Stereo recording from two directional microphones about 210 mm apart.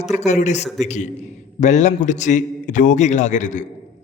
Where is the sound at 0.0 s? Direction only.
35° left (ahead or behind).